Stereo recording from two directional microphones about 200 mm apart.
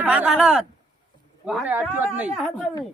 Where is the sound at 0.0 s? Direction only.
5° right (ahead or behind).